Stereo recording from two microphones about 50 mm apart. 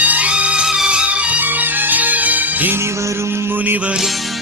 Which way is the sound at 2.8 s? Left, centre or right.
Right.